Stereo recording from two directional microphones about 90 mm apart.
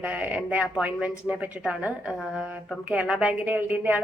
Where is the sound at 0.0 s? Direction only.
15° right (ahead or behind).